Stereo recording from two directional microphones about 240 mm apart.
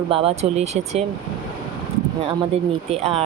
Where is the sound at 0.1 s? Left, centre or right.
Right.